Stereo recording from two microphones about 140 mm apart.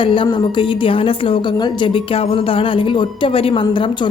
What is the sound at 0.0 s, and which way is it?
A woman's voice, 40° left (ahead or behind).